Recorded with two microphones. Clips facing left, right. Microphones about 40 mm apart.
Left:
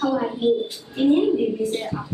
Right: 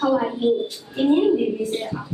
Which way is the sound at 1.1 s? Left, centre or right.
Centre.